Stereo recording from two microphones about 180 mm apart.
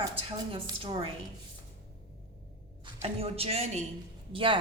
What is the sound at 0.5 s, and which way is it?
Speech, 25° right (ahead or behind).